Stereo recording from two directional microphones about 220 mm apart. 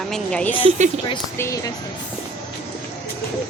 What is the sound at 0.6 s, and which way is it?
Speech, 35° right (ahead or behind).